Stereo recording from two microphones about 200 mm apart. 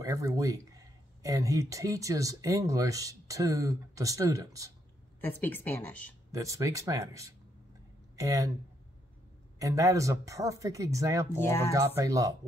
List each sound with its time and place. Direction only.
0.0 s speech: 15° right (ahead or behind)
5.2 s speech: 10° left (ahead or behind)
6.3 s speech: 15° right (ahead or behind)
9.6 s speech: 15° right (ahead or behind)
11.4 s speech: 10° left (ahead or behind)
11.7 s speech: 15° right (ahead or behind)